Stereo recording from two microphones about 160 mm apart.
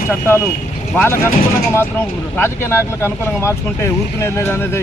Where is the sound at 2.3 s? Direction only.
15° left (ahead or behind).